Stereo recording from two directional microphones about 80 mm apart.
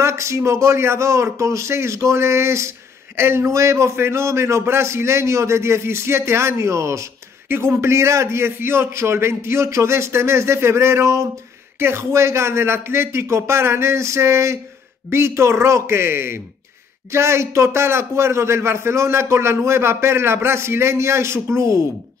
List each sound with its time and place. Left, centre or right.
0.0 s a man's voice: right